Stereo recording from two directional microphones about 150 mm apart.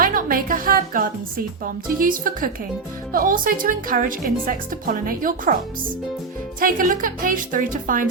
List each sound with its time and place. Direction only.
0.0 s a woman's voice: 70° right (ahead or behind)
6.6 s a woman's voice: 65° right (ahead or behind)